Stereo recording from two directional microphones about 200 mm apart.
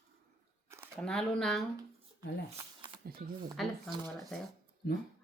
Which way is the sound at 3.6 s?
Centre (ahead or behind).